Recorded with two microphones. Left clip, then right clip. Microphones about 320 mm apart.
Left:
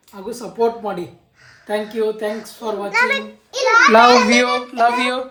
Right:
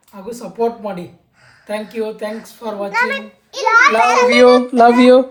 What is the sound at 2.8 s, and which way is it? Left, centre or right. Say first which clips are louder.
Speech: left 1 dB; centre.